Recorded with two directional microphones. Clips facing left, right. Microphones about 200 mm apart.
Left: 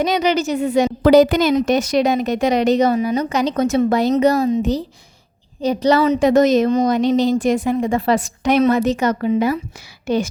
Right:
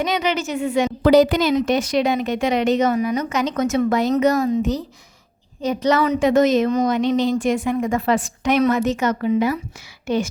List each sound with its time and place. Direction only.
0.0 s a woman's voice: 40° left (ahead or behind)
5.6 s a woman's voice: 35° left (ahead or behind)